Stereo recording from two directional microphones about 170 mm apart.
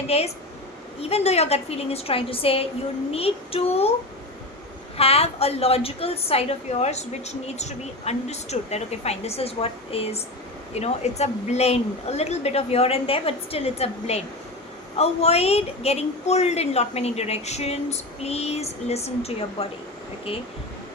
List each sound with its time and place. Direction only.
0.1 s a woman's voice: 35° left (ahead or behind)
4.9 s a woman's voice: 35° left (ahead or behind)